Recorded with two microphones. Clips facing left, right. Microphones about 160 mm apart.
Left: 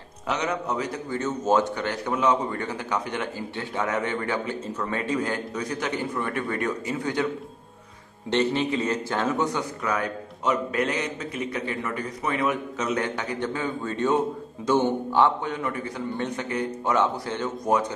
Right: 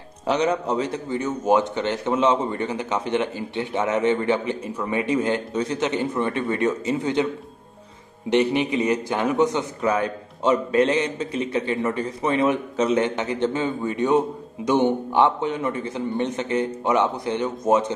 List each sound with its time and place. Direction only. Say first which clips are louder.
0.3 s a man's voice: right 6 dB; 30° right (ahead or behind)
8.3 s a man's voice: right 3 dB; 15° right (ahead or behind)